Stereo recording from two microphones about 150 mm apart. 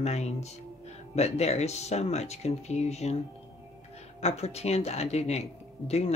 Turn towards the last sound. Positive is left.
turn(degrees=45)  # may be behind; listen again after turning